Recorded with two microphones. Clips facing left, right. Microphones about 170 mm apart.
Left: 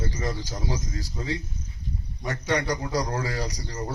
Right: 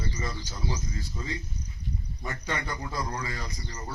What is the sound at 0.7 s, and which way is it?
A man's voice, 80° left.